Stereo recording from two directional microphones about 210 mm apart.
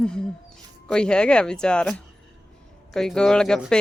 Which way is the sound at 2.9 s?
5° left (ahead or behind).